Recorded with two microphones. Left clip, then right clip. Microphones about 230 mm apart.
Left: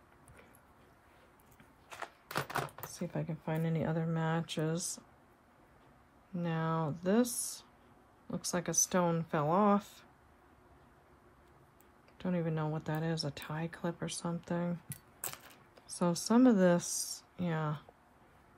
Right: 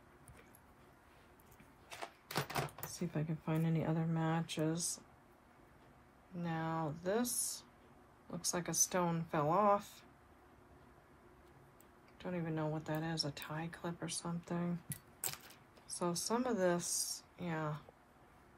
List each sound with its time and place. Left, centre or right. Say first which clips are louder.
1.9 s a sound: left 3 dB; centre
2.9 s speech: left 2 dB; left
6.4 s speech: left 4 dB; left
12.2 s speech: left 4 dB; left
14.9 s keys jangling: even; left
15.9 s speech: left 5 dB; left